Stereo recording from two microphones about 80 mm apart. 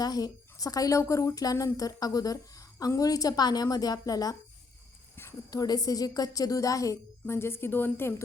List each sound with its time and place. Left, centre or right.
0.0 s a woman's voice: left
5.5 s a woman's voice: left